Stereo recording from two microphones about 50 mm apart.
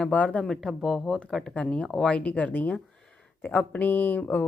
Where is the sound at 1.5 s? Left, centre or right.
Left.